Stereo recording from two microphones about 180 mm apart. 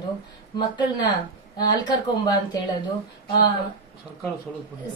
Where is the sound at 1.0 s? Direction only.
25° left (ahead or behind).